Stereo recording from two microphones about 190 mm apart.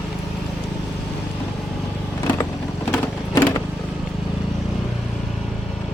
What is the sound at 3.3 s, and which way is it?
Vehicle, 20° left (ahead or behind).